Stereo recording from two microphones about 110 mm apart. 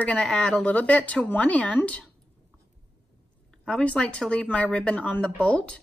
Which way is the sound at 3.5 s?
5° left (ahead or behind).